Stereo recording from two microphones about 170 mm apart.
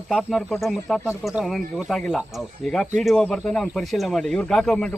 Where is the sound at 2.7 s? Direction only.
5° left (ahead or behind).